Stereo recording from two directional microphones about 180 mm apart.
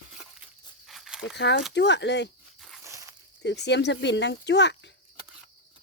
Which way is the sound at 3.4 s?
70° left (ahead or behind).